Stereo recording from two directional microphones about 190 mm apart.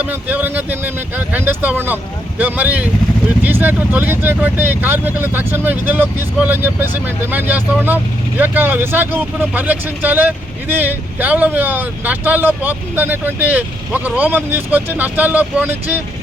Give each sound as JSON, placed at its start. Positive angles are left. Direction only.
{"t": 0.0, "sound": "speech", "side_deg": -10}